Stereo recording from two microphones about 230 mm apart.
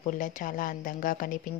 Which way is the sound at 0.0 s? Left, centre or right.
Left.